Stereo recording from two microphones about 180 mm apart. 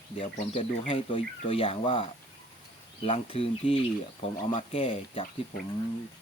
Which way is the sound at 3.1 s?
30° left (ahead or behind).